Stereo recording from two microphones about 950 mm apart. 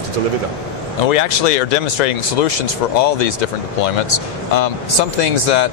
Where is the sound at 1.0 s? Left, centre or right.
Left.